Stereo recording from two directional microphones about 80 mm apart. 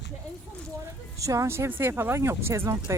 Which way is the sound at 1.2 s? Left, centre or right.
Right.